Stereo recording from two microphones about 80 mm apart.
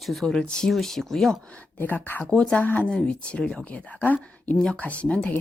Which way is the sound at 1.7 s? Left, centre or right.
Left.